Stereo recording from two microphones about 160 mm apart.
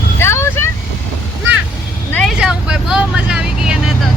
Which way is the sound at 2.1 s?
10° left (ahead or behind).